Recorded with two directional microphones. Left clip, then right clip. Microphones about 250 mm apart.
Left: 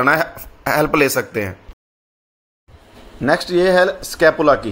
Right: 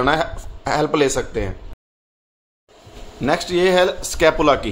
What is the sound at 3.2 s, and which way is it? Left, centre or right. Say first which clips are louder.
A man's voice: left 2 dB; centre.